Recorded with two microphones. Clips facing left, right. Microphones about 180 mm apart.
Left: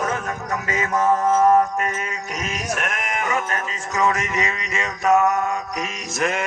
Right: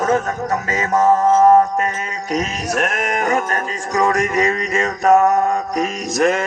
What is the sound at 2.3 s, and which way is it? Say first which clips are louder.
Speech: right 8 dB; 40° right (ahead or behind).